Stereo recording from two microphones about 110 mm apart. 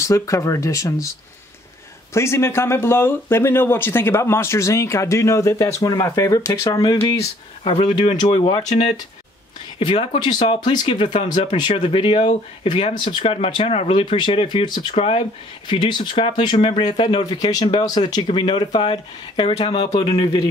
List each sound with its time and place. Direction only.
0.0 s speech: 30° left (ahead or behind)
2.1 s speech: 25° left (ahead or behind)
7.6 s speech: 50° left (ahead or behind)